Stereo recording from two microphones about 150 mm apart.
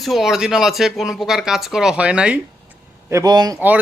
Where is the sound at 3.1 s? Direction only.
25° right (ahead or behind).